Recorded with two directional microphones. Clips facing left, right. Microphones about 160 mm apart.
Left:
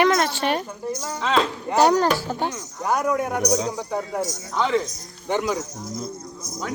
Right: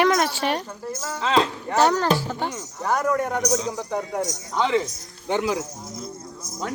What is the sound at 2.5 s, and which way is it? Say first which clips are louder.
Speech: even; 10° right (ahead or behind).